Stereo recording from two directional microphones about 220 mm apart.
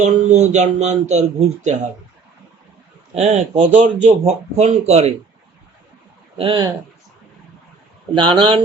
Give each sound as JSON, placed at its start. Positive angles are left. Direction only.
{"t": 0.0, "sound": "speech", "side_deg": -30}
{"t": 3.2, "sound": "speech", "side_deg": -30}
{"t": 6.3, "sound": "speech", "side_deg": -25}
{"t": 8.1, "sound": "speech", "side_deg": -20}